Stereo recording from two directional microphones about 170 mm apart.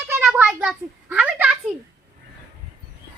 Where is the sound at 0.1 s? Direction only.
10° right (ahead or behind).